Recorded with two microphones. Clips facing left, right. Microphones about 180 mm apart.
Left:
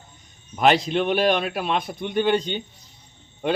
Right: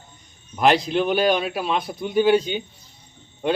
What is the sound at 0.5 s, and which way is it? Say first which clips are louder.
A man's voice: right 1 dB; centre (ahead or behind).